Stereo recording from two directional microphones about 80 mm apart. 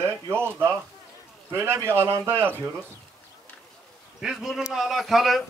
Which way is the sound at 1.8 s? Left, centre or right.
Right.